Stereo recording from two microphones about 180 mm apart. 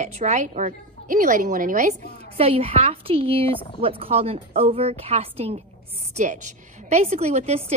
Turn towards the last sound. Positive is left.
turn(degrees=-35)  # may be behind; listen again after turning